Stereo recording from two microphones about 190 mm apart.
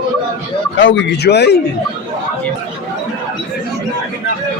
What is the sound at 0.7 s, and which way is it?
Speech, 75° left (ahead or behind).